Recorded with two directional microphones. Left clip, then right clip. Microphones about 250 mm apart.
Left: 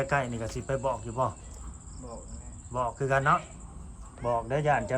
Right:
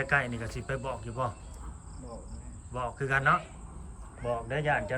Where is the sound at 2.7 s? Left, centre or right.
Centre.